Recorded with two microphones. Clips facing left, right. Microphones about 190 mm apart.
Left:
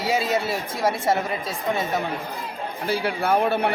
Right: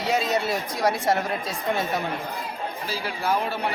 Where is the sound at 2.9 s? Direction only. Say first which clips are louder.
Left 5 dB; 55° left (ahead or behind).